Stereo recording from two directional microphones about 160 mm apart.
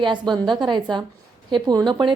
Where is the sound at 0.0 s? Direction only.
30° right (ahead or behind).